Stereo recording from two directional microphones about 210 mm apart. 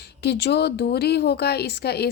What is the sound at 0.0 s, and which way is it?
A woman's voice, 50° left (ahead or behind).